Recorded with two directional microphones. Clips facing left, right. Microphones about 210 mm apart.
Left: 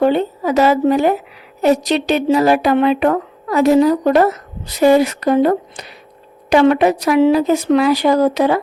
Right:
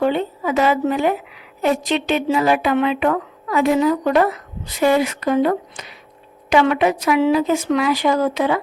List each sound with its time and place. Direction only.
0.0 s speech: 40° left (ahead or behind)